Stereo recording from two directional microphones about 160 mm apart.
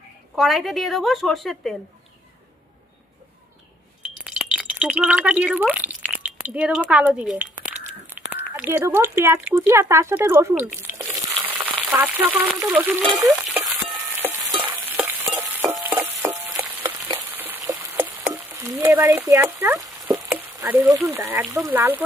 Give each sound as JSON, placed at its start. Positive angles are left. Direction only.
{"t": 0.3, "sound": "a woman's voice", "side_deg": 0}
{"t": 4.0, "sound": "chink", "side_deg": -5}
{"t": 8.2, "sound": "a sound", "side_deg": -10}
{"t": 8.5, "sound": "speech", "side_deg": -15}
{"t": 10.8, "sound": "a sound", "side_deg": -15}
{"t": 11.4, "sound": "frying", "side_deg": -10}
{"t": 13.1, "sound": "a sound", "side_deg": -20}
{"t": 14.2, "sound": "stir", "side_deg": -15}
{"t": 15.9, "sound": "frying", "side_deg": -10}
{"t": 17.1, "sound": "a sound", "side_deg": -15}
{"t": 18.3, "sound": "frying", "side_deg": -15}
{"t": 20.3, "sound": "speech", "side_deg": -10}